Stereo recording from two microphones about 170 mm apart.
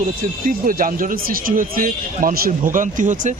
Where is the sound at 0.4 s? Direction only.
55° right (ahead or behind).